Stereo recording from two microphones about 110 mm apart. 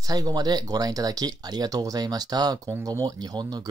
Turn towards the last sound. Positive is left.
turn(degrees=-35)  # may be behind; listen again after turning